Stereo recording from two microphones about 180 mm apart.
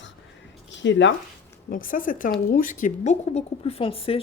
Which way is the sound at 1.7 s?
50° left (ahead or behind).